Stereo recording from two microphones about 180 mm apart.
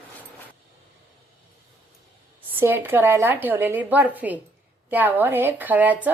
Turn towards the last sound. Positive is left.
turn(degrees=-10)  # may be behind; listen again after turning